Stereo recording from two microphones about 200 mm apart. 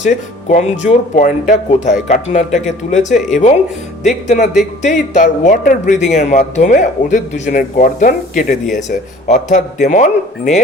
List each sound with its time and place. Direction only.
0.0 s speech: 35° left (ahead or behind)